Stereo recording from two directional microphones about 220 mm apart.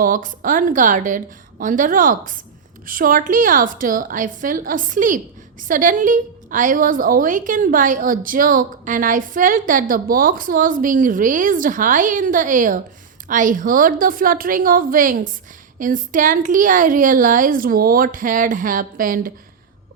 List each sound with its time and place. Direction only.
0.0 s a woman's voice: 40° right (ahead or behind)